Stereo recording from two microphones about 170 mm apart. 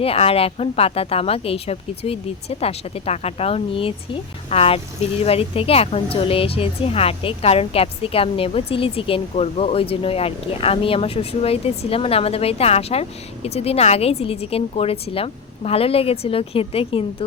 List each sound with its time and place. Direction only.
0.0 s speech: 35° left (ahead or behind)